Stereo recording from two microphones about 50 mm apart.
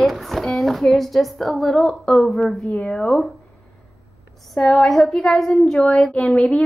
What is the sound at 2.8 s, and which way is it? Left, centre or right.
Speech, centre.